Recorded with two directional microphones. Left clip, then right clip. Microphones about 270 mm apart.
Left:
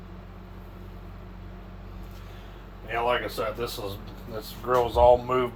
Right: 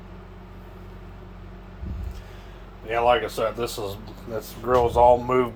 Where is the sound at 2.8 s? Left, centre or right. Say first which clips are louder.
Right 6 dB; right.